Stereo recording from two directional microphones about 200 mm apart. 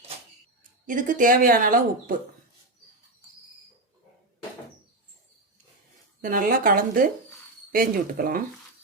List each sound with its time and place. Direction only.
0.9 s speech: 40° right (ahead or behind)
6.2 s speech: 45° right (ahead or behind)